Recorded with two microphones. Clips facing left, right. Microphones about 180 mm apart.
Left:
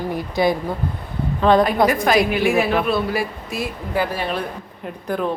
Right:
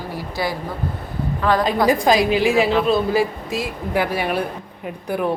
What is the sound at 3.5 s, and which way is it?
Speech, 15° right (ahead or behind).